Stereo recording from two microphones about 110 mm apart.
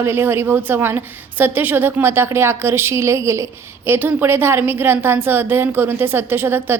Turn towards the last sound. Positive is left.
turn(degrees=-20)  # may be behind; listen again after turning